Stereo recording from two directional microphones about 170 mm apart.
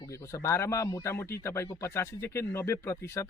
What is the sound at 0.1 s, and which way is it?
Speech, 15° left (ahead or behind).